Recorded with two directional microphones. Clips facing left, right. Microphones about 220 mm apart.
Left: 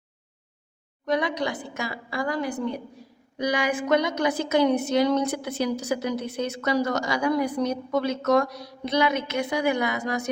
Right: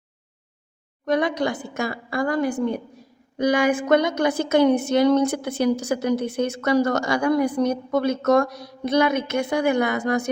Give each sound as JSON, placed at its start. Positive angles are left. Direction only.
{"t": 1.0, "sound": "a woman's voice", "side_deg": -50}